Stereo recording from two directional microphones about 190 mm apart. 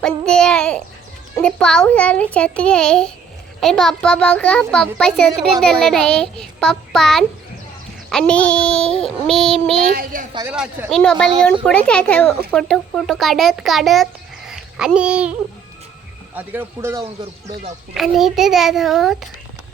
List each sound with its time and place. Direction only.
0.0 s a child's voice: 5° left (ahead or behind)
9.9 s a child's voice: 50° right (ahead or behind)
10.4 s a child's voice: 5° right (ahead or behind)
16.3 s a man's voice: 10° right (ahead or behind)